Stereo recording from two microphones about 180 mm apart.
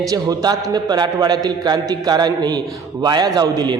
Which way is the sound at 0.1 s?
20° right (ahead or behind).